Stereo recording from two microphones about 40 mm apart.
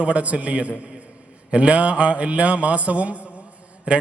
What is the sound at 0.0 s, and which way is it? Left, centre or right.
A man's voice, right.